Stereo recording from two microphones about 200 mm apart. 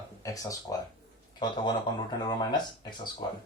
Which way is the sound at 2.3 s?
20° left (ahead or behind).